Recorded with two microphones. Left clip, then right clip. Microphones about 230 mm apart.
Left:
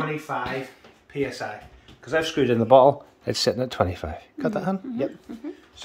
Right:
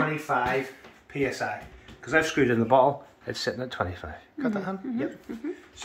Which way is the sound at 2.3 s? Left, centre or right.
Left.